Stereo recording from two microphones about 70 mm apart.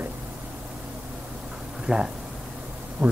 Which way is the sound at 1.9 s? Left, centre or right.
Centre.